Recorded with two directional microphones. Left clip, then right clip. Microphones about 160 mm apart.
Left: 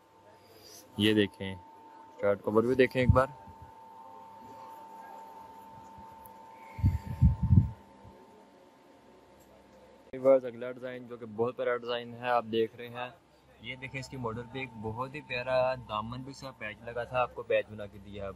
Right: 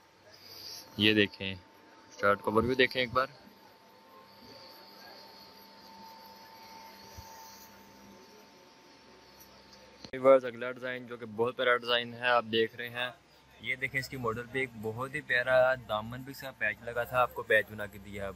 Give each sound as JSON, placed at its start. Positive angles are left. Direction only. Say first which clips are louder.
{"t": 0.7, "sound": "a sound", "louder": "right 1 dB", "side_deg": 40}
{"t": 1.0, "sound": "speech", "louder": "right 1 dB", "side_deg": 30}
{"t": 10.1, "sound": "speech", "louder": "right 1 dB", "side_deg": 5}